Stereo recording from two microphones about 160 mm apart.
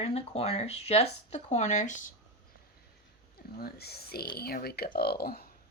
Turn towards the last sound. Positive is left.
turn(degrees=75)  # may be behind; listen again after turning